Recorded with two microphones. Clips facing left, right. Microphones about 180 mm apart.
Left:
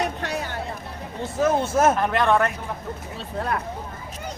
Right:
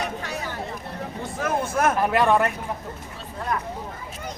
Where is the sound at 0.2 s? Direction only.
65° left (ahead or behind).